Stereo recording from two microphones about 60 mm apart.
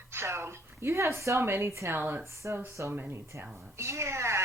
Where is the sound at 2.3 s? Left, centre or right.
Right.